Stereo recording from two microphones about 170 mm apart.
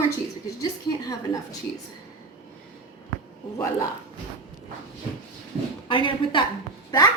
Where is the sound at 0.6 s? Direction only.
20° left (ahead or behind).